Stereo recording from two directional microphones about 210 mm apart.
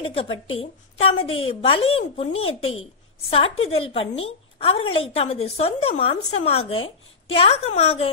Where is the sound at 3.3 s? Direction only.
25° left (ahead or behind).